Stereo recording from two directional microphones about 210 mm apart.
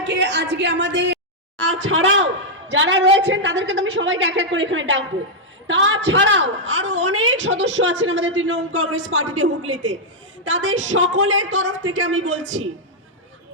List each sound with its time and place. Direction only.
0.0 s a man's voice: 55° right (ahead or behind)
1.6 s a man's voice: 70° right (ahead or behind)